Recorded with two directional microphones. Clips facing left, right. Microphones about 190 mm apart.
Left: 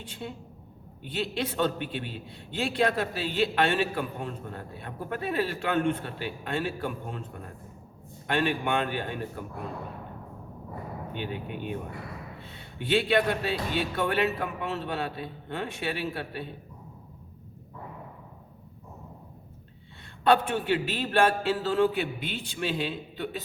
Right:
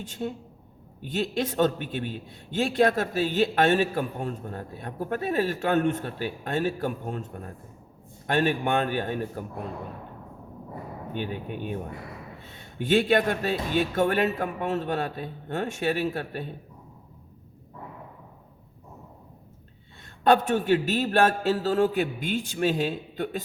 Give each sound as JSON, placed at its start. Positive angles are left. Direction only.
{"t": 0.0, "sound": "a man's voice", "side_deg": -45}
{"t": 11.1, "sound": "a man's voice", "side_deg": -45}
{"t": 12.8, "sound": "a man's voice", "side_deg": -45}
{"t": 20.2, "sound": "a man's voice", "side_deg": -45}